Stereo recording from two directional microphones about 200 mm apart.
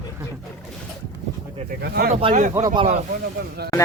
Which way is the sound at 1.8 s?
50° right (ahead or behind).